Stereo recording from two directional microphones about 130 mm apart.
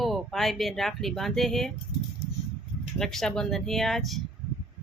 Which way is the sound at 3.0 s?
5° left (ahead or behind).